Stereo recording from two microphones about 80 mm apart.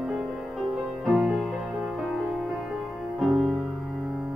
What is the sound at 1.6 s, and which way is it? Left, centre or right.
Music, centre.